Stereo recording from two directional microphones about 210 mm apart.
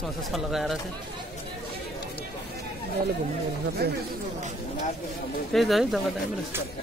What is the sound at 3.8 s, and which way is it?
Speech, 50° right (ahead or behind).